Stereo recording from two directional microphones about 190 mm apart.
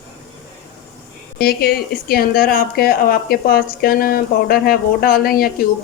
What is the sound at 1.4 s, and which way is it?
Speech, 55° left (ahead or behind).